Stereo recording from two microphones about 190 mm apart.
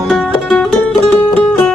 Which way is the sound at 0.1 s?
5° left (ahead or behind).